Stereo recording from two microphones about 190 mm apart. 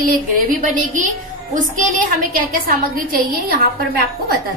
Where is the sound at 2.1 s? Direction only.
50° right (ahead or behind).